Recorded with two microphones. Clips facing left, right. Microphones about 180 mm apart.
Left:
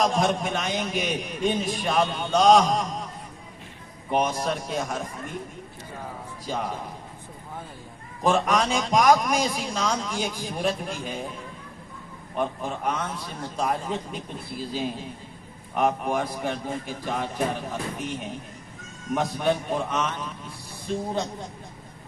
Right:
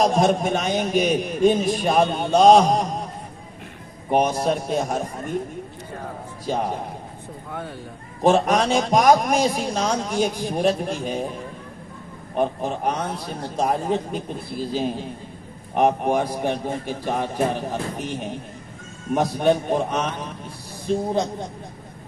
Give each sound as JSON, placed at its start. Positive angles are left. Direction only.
{"t": 0.0, "sound": "a man's voice", "side_deg": -40}
{"t": 4.1, "sound": "a man's voice", "side_deg": -35}
{"t": 6.5, "sound": "a man's voice", "side_deg": -40}
{"t": 8.2, "sound": "a man's voice", "side_deg": -40}
{"t": 12.4, "sound": "a man's voice", "side_deg": -40}